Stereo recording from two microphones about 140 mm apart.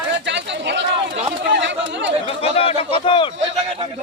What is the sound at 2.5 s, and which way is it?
Speech, 40° left (ahead or behind).